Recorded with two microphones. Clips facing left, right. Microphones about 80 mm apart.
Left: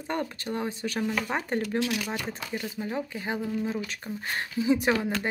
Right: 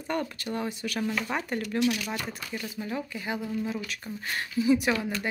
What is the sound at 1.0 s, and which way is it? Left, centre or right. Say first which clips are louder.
Speech: left 1 dB; centre.